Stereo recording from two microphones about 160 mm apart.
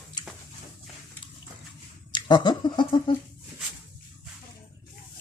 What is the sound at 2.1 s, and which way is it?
Speech, 30° left (ahead or behind).